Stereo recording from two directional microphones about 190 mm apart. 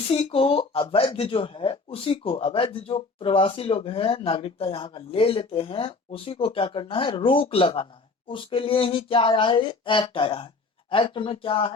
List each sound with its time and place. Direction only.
0.1 s speech: 30° left (ahead or behind)